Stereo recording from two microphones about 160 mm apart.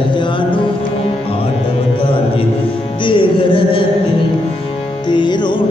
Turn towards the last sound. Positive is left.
turn(degrees=30)  # may be behind; listen again after turning